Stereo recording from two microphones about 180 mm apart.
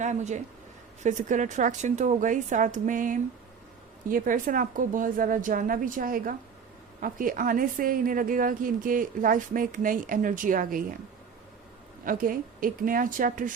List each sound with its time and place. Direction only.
0.0 s a woman's voice: 40° right (ahead or behind)
12.0 s a woman's voice: 50° right (ahead or behind)